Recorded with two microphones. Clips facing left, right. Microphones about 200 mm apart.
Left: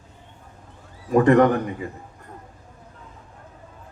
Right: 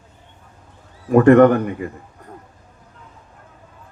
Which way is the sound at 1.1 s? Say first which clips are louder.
Right 5 dB; 60° right (ahead or behind).